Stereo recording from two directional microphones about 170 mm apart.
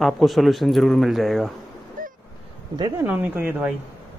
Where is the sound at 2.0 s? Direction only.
50° right (ahead or behind).